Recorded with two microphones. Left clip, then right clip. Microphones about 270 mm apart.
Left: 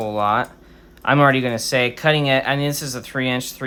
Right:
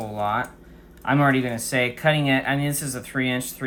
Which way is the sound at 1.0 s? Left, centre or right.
Centre.